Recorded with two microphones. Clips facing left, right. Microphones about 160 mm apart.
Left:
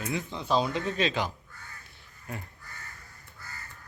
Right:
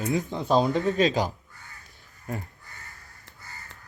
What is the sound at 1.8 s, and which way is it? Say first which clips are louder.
Crow: right 9 dB; 40° right (ahead or behind).